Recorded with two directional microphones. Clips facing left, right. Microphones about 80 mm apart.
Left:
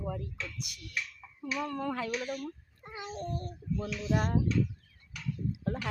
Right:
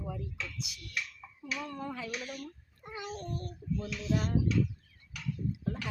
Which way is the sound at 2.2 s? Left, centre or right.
Left.